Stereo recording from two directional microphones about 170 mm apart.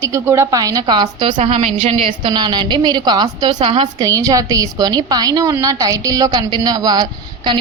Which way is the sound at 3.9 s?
20° right (ahead or behind).